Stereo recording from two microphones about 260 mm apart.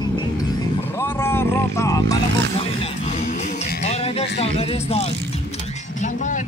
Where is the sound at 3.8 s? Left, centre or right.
Left.